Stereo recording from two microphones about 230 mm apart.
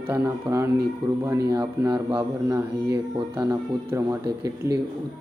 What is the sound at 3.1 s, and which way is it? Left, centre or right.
Speech, right.